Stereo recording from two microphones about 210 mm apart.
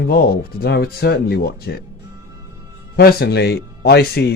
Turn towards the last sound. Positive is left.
turn(degrees=50)  # may be behind; listen again after turning